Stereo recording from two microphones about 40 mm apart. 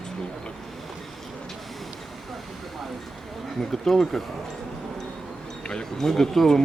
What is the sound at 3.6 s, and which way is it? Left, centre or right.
Speech, centre.